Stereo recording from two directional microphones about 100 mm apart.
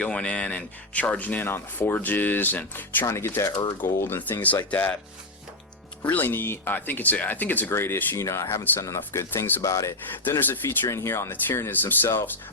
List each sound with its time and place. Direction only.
0.0 s speech: 10° left (ahead or behind)
3.5 s speech: 50° left (ahead or behind)
3.8 s speech: 20° left (ahead or behind)
6.1 s speech: 20° left (ahead or behind)
10.4 s speech: 25° left (ahead or behind)